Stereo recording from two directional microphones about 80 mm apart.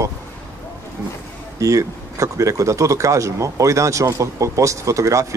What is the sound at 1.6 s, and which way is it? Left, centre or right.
Speech, right.